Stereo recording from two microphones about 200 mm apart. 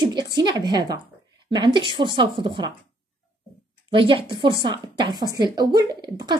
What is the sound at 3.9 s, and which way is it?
A woman's voice, 25° right (ahead or behind).